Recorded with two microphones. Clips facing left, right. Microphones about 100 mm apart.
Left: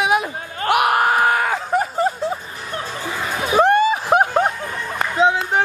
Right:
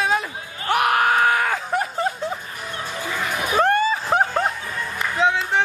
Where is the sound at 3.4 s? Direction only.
20° left (ahead or behind).